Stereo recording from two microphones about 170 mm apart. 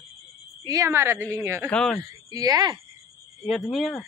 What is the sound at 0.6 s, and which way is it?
A woman's voice, 20° right (ahead or behind).